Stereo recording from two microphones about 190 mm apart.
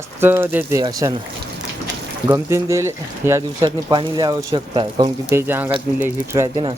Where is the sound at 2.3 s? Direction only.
15° right (ahead or behind).